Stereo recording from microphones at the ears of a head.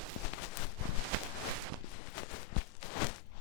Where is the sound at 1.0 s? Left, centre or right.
Right.